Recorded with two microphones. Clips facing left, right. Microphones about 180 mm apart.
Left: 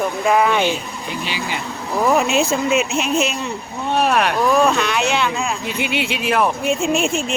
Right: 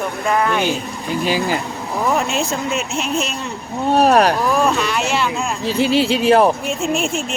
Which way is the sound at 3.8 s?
40° right (ahead or behind).